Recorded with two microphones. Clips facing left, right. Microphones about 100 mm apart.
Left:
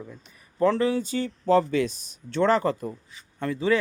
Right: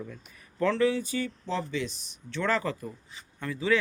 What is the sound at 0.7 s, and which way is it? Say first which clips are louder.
Speech: left 2 dB; 40° left (ahead or behind).